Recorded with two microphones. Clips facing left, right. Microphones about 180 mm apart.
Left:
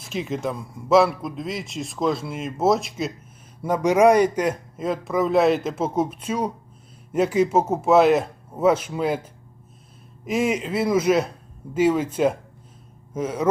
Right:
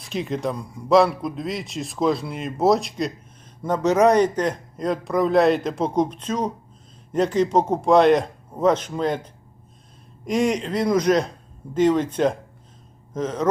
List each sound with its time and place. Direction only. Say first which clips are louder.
0.0 s a man's voice: right 1 dB; centre (ahead or behind)